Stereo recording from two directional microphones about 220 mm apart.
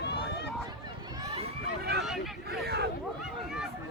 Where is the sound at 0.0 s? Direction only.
50° left (ahead or behind).